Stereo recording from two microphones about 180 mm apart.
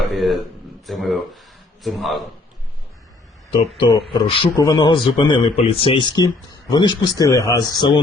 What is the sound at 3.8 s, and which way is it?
Speech, 25° left (ahead or behind).